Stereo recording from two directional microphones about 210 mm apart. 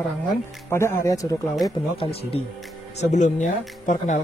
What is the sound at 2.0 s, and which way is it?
Speech, 30° left (ahead or behind).